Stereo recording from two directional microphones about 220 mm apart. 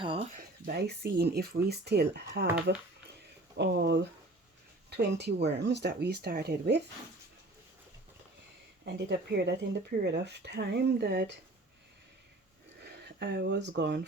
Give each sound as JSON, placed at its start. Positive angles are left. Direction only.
{"t": 0.0, "sound": "speech", "side_deg": -25}
{"t": 0.3, "sound": "speech", "side_deg": -40}
{"t": 3.6, "sound": "speech", "side_deg": -50}
{"t": 8.8, "sound": "speech", "side_deg": -50}
{"t": 12.8, "sound": "speech", "side_deg": -50}